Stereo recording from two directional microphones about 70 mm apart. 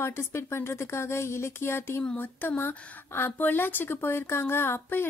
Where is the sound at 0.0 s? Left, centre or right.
Left.